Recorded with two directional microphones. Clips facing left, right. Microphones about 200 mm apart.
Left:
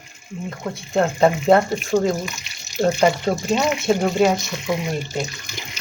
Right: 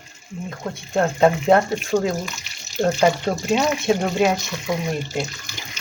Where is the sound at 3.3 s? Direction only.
15° left (ahead or behind).